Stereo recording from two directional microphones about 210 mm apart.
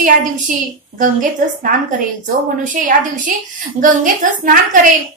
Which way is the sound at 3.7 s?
40° right (ahead or behind).